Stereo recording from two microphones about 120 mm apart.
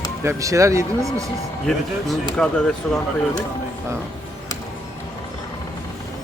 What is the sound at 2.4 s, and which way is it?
Speech, 5° left (ahead or behind).